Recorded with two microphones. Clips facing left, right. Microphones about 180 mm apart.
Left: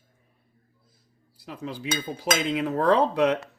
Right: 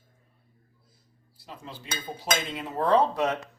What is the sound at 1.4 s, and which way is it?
Cutlery, 90° left.